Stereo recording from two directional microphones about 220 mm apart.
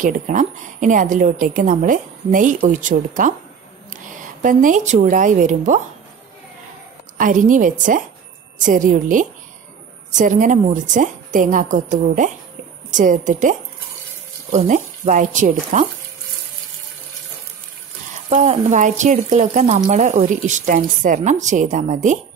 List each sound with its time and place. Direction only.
0.0 s a woman's voice: 35° right (ahead or behind)
7.2 s a woman's voice: 35° right (ahead or behind)
18.3 s a woman's voice: 30° right (ahead or behind)